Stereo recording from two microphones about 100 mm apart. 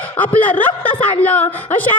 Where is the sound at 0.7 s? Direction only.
55° left (ahead or behind).